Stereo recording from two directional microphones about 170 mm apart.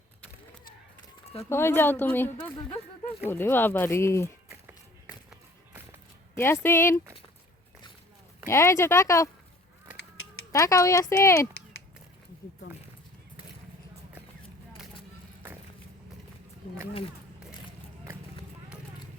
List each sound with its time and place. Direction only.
1.4 s speech: 15° left (ahead or behind)
2.4 s speech: 30° left (ahead or behind)
3.2 s speech: 15° left (ahead or behind)
6.3 s speech: 15° left (ahead or behind)
8.4 s speech: 15° left (ahead or behind)
10.5 s speech: 20° left (ahead or behind)